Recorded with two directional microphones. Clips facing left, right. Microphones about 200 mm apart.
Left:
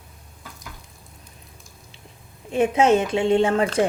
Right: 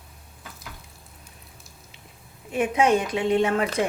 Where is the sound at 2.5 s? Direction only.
25° left (ahead or behind).